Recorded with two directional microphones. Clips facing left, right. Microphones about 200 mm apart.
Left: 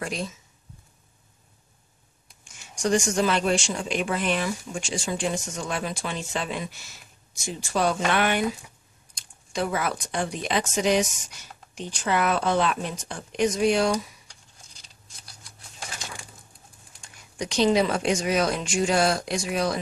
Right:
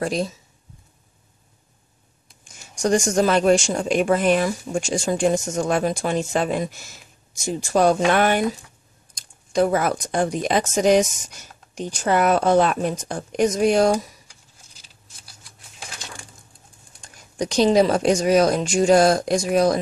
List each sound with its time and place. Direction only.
0.0 s speech: 35° right (ahead or behind)
2.4 s speech: 40° right (ahead or behind)
17.0 s speech: 40° right (ahead or behind)